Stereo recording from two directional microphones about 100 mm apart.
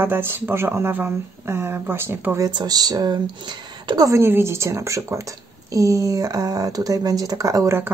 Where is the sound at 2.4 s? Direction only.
40° right (ahead or behind).